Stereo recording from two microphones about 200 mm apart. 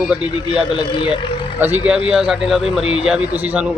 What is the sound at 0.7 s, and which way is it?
Speech, 25° left (ahead or behind).